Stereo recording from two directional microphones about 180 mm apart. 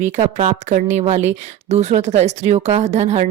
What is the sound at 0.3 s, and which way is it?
A woman's voice, 40° right (ahead or behind).